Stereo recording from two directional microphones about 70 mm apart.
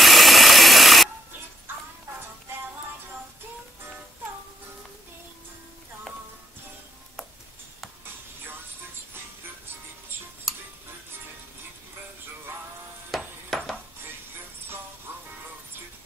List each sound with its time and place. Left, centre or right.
0.0 s ratchet: centre
1.7 s music: right
13.1 s music: centre